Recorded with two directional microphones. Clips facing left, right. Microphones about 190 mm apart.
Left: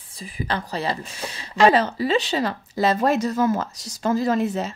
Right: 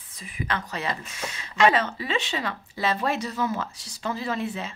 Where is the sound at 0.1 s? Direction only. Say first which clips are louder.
Left 3 dB; 35° left (ahead or behind).